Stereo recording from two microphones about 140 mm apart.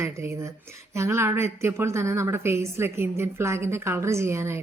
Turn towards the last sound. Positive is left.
turn(degrees=-20)  # may be behind; listen again after turning